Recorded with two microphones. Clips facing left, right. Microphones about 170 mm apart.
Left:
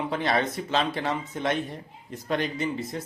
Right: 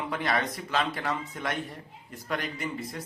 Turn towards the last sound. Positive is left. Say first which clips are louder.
# left 5 dB
turn(degrees=25)  # may be behind; listen again after turning